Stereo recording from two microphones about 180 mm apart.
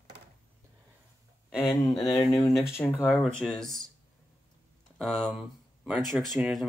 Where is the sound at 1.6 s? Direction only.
20° left (ahead or behind); by 3.7 s 5° left (ahead or behind).